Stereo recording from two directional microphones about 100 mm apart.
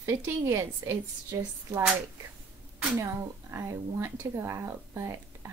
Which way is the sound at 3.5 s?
25° right (ahead or behind).